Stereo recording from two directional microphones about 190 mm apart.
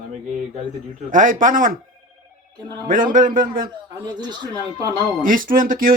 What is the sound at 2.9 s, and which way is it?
Speech, 45° right (ahead or behind).